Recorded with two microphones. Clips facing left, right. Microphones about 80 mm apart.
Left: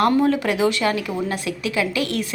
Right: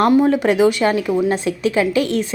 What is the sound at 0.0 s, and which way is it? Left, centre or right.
A woman's voice, right.